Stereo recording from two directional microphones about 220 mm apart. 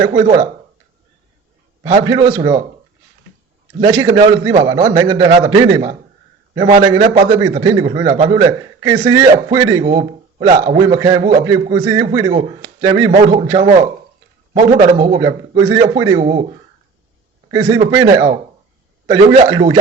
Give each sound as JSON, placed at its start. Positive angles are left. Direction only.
{"t": 1.8, "sound": "a man's voice", "side_deg": -15}
{"t": 3.8, "sound": "a man's voice", "side_deg": -15}
{"t": 10.6, "sound": "a man's voice", "side_deg": -20}
{"t": 17.5, "sound": "a man's voice", "side_deg": -15}
{"t": 19.5, "sound": "a man's voice", "side_deg": -15}